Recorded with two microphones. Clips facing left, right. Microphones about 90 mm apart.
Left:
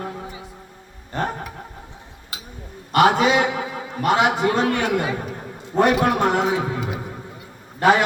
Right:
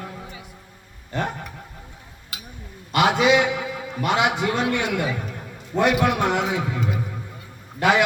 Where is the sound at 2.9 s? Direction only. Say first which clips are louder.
Left 2 dB; 40° left (ahead or behind).